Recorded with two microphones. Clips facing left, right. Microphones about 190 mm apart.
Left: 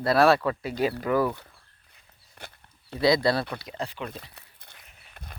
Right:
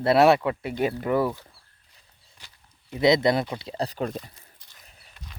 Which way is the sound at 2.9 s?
20° right (ahead or behind).